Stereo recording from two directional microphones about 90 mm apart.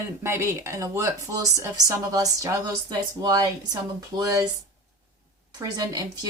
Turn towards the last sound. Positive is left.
turn(degrees=-45)  # may be behind; listen again after turning